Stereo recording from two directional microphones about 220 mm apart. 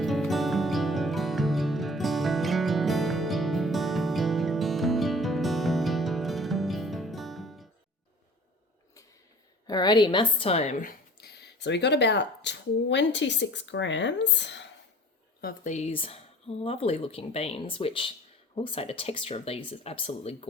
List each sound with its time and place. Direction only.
0.0 s music: centre (ahead or behind)
9.6 s a woman's voice: 20° left (ahead or behind); by 14.7 s 55° left (ahead or behind)
15.4 s speech: 40° left (ahead or behind)